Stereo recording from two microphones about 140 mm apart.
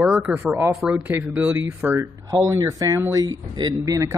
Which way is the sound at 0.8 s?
Centre (ahead or behind).